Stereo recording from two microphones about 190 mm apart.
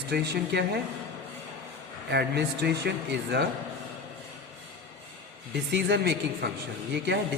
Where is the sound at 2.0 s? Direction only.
60° right (ahead or behind).